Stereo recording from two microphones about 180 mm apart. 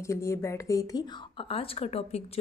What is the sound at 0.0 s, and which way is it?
A woman's voice, 15° left (ahead or behind).